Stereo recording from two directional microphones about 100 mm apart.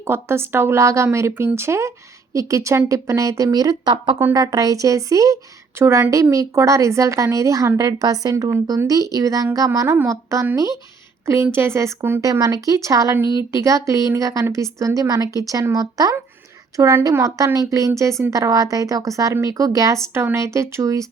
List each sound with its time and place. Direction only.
0.0 s a woman's voice: 25° right (ahead or behind)
1.3 s speech: 15° right (ahead or behind)
1.5 s a woman's voice: 25° right (ahead or behind)
12.2 s a woman's voice: 35° right (ahead or behind)